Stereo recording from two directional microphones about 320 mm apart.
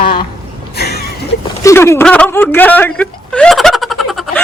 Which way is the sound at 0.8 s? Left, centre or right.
Left.